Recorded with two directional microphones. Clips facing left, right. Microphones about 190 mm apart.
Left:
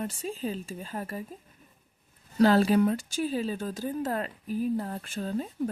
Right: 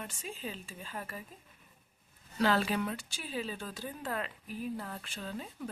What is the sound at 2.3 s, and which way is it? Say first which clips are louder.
Speech: left 9 dB; 40° left (ahead or behind).